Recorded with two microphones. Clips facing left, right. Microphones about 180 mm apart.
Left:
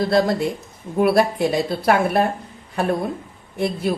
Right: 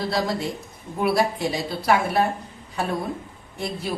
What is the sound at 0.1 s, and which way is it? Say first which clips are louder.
A woman's voice: left 7 dB; 55° left (ahead or behind).